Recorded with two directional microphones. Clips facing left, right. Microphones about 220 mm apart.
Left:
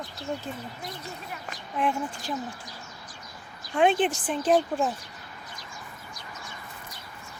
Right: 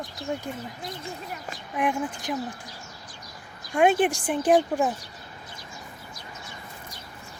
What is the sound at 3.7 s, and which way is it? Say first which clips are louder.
Speech: right 2 dB; 10° right (ahead or behind).